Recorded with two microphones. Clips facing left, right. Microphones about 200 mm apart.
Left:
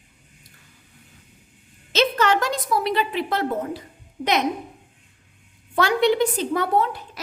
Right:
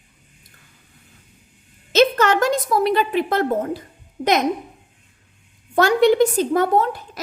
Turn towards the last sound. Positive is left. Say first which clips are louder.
# right 3 dB
turn(degrees=-45)  # may be behind; listen again after turning